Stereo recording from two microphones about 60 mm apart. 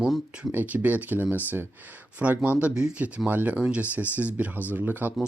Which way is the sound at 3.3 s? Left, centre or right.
Right.